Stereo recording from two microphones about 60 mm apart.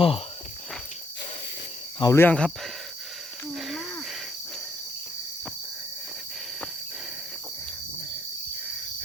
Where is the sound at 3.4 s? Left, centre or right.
Centre.